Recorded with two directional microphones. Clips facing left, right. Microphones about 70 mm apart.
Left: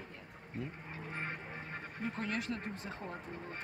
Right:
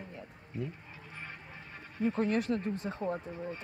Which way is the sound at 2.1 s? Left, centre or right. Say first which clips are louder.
Right 8 dB; right.